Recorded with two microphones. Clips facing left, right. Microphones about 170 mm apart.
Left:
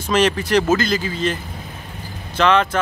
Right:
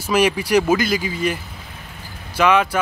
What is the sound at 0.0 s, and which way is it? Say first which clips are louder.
Speech: even; 10° right (ahead or behind).